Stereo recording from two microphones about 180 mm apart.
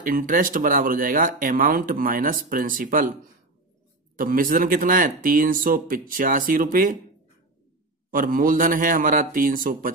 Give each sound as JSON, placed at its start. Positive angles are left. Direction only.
{"t": 0.0, "sound": "speech", "side_deg": -50}
{"t": 4.2, "sound": "speech", "side_deg": -50}
{"t": 8.1, "sound": "speech", "side_deg": -50}